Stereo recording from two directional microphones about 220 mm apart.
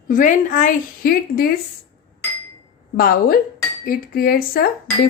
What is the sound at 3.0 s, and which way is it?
A woman's voice, 40° left (ahead or behind).